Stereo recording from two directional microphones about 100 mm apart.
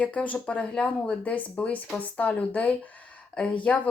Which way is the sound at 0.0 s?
15° left (ahead or behind).